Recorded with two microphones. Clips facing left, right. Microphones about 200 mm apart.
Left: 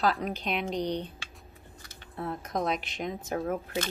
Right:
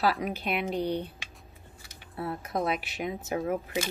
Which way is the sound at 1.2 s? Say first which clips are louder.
Even; 20° right (ahead or behind).